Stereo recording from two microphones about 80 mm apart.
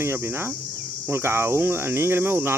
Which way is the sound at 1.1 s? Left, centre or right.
Right.